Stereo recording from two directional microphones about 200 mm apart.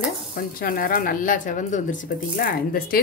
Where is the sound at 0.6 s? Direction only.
45° left (ahead or behind).